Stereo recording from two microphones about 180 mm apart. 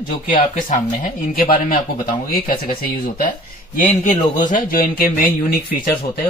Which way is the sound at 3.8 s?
45° left (ahead or behind).